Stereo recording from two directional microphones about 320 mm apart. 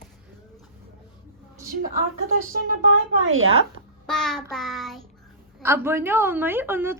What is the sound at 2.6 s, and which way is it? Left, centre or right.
Speech, right.